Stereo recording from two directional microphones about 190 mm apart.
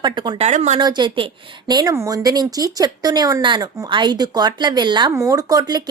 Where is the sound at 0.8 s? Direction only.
25° right (ahead or behind).